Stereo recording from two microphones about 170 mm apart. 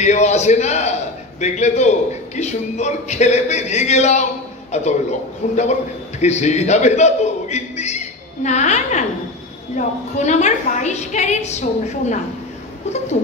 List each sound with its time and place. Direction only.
0.0 s a man's voice: 45° left (ahead or behind)